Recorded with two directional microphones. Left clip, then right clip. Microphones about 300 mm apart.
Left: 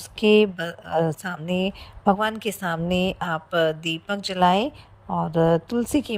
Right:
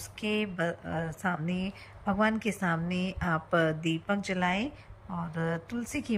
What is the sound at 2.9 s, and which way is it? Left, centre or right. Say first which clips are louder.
Speech: left 12 dB; centre.